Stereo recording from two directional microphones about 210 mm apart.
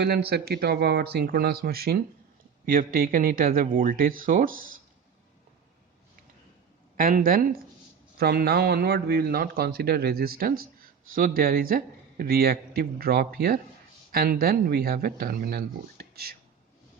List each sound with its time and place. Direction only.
0.0 s speech: 50° right (ahead or behind)
6.9 s speech: 40° right (ahead or behind)